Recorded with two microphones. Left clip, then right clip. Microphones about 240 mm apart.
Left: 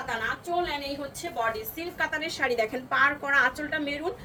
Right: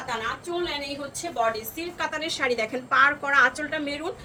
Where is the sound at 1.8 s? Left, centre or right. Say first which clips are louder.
Even; centre.